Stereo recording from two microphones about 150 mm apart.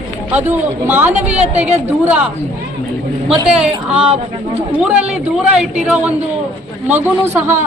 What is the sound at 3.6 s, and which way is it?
A man's voice, 5° right (ahead or behind).